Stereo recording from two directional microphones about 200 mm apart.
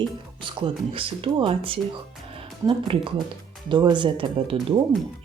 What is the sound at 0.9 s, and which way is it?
Speech, 25° right (ahead or behind).